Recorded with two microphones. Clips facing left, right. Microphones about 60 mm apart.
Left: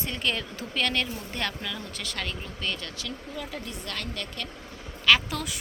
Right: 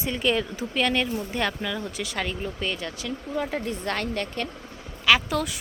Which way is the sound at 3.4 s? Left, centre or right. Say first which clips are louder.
Right 12 dB; right.